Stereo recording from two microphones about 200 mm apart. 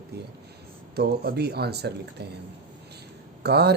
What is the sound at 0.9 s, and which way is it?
Speech, 55° right (ahead or behind).